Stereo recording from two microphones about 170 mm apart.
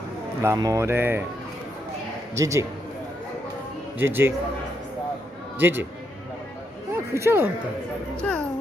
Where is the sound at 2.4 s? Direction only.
20° right (ahead or behind).